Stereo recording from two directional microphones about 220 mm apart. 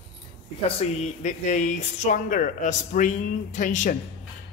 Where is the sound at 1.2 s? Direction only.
35° left (ahead or behind).